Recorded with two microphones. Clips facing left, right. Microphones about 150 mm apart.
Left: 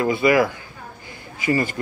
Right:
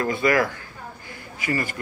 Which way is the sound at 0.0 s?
15° left (ahead or behind).